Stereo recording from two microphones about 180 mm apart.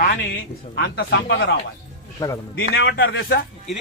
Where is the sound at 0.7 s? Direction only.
80° left.